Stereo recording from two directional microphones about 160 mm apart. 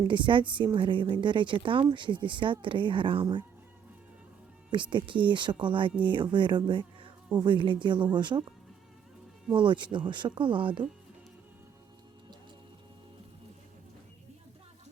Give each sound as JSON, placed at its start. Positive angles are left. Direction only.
{"t": 0.1, "sound": "a woman's voice", "side_deg": -30}
{"t": 4.7, "sound": "a woman's voice", "side_deg": -30}
{"t": 9.5, "sound": "a woman's voice", "side_deg": -30}